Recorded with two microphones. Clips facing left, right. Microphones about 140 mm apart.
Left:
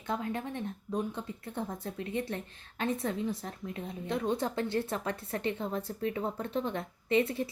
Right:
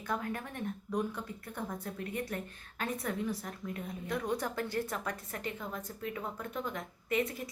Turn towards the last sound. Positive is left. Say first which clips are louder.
# left 5 dB
turn(degrees=30)  # may be behind; listen again after turning